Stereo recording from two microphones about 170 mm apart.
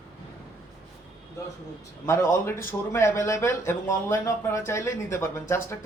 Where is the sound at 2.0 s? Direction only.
15° left (ahead or behind).